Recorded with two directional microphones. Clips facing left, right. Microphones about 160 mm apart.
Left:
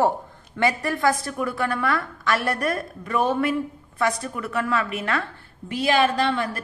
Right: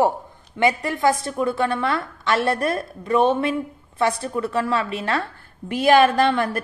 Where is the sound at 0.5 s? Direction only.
20° right (ahead or behind).